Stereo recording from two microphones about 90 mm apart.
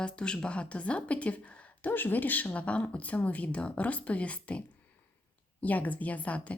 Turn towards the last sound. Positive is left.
turn(degrees=15)  # may be behind; listen again after turning